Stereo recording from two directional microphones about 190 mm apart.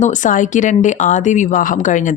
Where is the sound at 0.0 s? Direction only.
40° left (ahead or behind).